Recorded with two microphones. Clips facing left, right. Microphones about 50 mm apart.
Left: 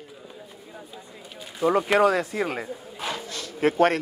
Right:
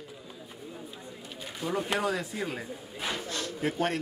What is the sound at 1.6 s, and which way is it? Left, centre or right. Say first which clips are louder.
Speech: left 10 dB; left.